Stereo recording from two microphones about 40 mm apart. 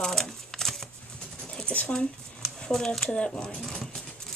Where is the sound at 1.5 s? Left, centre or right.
Left.